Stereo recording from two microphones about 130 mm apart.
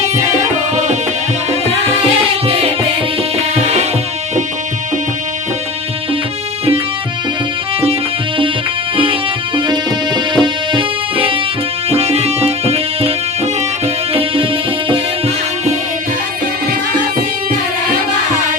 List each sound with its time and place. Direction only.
2.5 s music: 50° right (ahead or behind)
3.6 s music: 60° right (ahead or behind)
10.3 s music: 35° right (ahead or behind)
11.9 s music: 50° right (ahead or behind)